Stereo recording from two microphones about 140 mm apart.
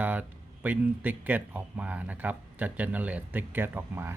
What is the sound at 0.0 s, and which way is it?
Speech, 10° right (ahead or behind).